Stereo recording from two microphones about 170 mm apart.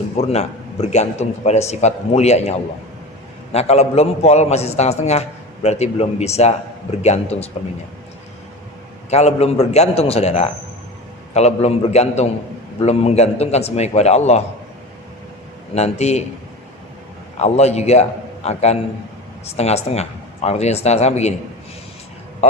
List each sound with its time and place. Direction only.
0.2 s a man's voice: 40° left (ahead or behind)
9.0 s a man's voice: 40° left (ahead or behind)
15.7 s a man's voice: 40° left (ahead or behind)
17.3 s a man's voice: 40° left (ahead or behind)